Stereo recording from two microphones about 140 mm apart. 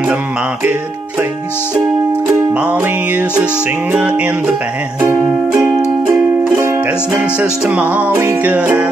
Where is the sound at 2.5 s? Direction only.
10° right (ahead or behind).